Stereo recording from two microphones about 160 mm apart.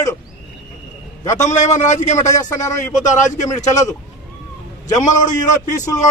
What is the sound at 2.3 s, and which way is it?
A man's voice, 20° left (ahead or behind).